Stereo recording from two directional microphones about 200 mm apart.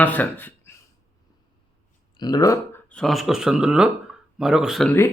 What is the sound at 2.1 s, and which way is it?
Speech, 20° left (ahead or behind).